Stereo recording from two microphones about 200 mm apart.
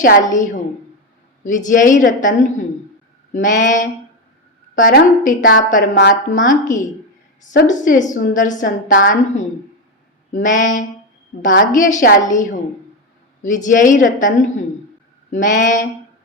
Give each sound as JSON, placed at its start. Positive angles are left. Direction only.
{"t": 0.0, "sound": "a woman's voice", "side_deg": 40}
{"t": 1.5, "sound": "a woman's voice", "side_deg": 40}
{"t": 5.9, "sound": "speech", "side_deg": 55}
{"t": 6.3, "sound": "a woman's voice", "side_deg": 40}
{"t": 7.7, "sound": "a woman's voice", "side_deg": 40}